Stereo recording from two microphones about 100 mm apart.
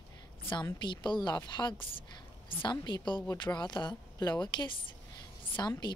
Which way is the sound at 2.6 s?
50° left (ahead or behind).